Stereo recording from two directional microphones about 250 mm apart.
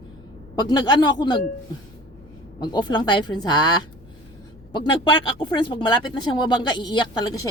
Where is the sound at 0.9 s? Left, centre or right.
Centre.